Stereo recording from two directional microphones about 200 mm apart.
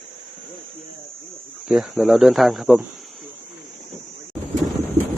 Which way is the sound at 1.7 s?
Centre (ahead or behind).